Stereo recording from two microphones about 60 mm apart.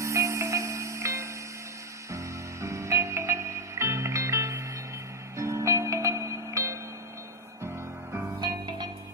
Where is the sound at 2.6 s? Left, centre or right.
Right.